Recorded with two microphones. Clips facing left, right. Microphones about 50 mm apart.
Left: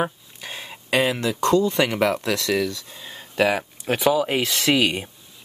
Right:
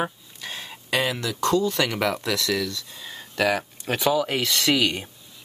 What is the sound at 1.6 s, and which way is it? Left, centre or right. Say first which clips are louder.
Speech: left 3 dB; centre.